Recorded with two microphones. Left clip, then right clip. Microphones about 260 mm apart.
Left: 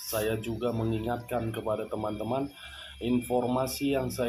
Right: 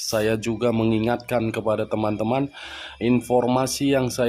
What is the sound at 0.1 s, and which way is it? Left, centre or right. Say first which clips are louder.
Speech: right 8 dB; right.